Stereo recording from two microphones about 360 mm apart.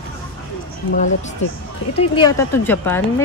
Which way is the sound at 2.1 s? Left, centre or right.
Centre.